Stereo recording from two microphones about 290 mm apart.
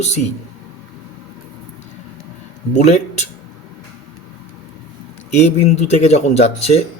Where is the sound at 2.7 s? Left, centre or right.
Left.